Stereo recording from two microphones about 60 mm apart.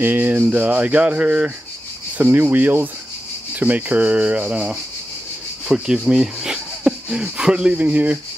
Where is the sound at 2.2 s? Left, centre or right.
Right.